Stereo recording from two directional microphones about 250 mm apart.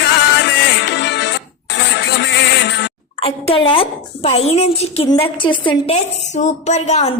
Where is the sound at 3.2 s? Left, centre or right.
Left.